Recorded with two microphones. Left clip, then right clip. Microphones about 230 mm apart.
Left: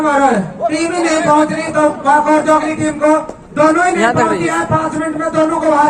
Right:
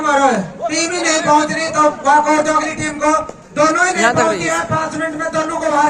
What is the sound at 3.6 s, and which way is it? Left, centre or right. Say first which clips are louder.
Speech: left 2 dB; right.